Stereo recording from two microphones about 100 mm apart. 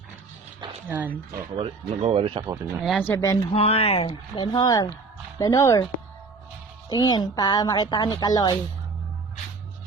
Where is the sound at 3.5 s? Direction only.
85° left.